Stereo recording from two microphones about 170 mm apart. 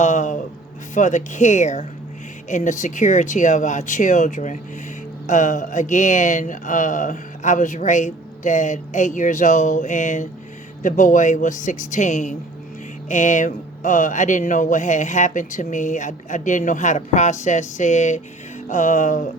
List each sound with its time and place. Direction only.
0.0 s speech: 45° left (ahead or behind)